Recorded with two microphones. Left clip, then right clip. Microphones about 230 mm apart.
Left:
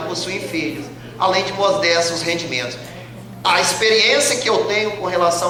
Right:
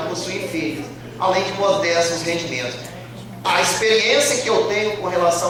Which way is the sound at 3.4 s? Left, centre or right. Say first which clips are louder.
Left 2 dB; centre.